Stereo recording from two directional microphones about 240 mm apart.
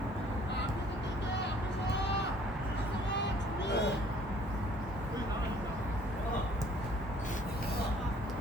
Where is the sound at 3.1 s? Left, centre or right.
Left.